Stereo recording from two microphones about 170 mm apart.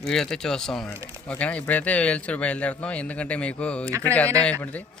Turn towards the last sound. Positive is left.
turn(degrees=5)  # may be behind; listen again after turning